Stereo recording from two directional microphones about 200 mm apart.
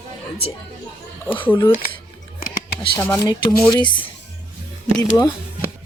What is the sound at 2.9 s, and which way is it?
Speech, 15° left (ahead or behind).